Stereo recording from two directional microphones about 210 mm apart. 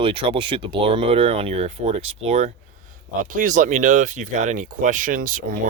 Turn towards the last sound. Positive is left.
turn(degrees=-40)  # may be behind; listen again after turning